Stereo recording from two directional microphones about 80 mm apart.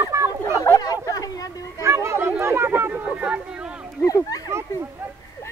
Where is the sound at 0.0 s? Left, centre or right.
Right.